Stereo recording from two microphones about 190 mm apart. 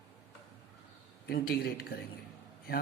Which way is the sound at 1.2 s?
55° left (ahead or behind).